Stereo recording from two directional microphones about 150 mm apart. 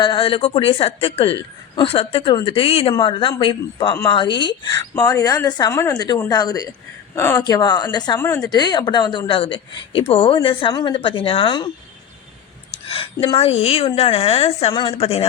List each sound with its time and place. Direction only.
0.0 s a woman's voice: 35° left (ahead or behind)
7.2 s speech: 15° left (ahead or behind)
7.4 s speech: 25° left (ahead or behind)
8.2 s speech: 15° left (ahead or behind)
8.4 s a woman's voice: 30° left (ahead or behind)
12.9 s a woman's voice: 40° left (ahead or behind)